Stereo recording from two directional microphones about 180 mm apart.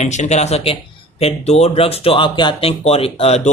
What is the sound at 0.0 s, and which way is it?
Speech, 40° left (ahead or behind).